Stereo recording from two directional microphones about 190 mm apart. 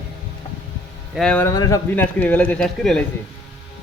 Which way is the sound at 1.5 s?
15° left (ahead or behind).